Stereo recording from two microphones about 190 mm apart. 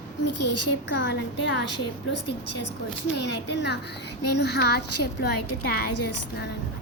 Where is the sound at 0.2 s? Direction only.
65° left (ahead or behind).